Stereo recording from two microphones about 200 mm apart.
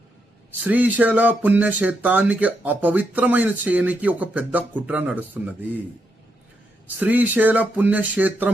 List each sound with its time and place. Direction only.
0.6 s speech: 10° right (ahead or behind)
7.0 s speech: 10° right (ahead or behind)